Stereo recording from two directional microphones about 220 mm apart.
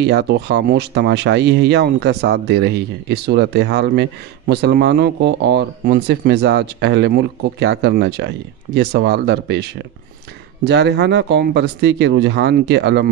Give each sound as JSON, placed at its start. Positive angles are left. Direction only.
{"t": 0.0, "sound": "speech", "side_deg": -50}